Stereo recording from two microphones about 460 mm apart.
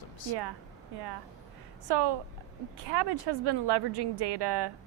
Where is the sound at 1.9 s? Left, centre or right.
Right.